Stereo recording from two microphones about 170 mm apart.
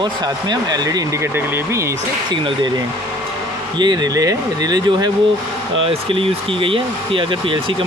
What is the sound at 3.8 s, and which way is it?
Speech, 25° right (ahead or behind).